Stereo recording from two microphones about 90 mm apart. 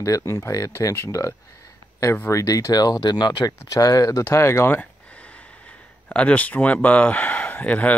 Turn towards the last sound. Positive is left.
turn(degrees=15)  # may be behind; listen again after turning